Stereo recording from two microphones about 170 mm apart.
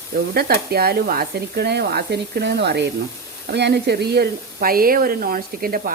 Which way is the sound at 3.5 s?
80° right.